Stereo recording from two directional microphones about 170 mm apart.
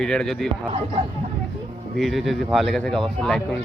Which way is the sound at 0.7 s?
30° right (ahead or behind).